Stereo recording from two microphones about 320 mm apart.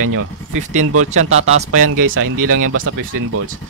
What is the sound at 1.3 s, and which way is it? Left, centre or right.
Speech, centre.